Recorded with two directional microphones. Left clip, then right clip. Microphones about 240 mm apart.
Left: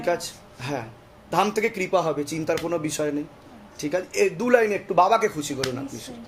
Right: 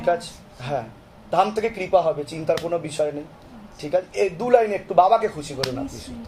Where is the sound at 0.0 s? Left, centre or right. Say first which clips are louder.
Right 3 dB; left.